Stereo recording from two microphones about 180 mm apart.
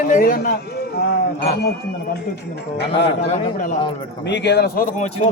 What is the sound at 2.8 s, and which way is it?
Speech, 75° left (ahead or behind).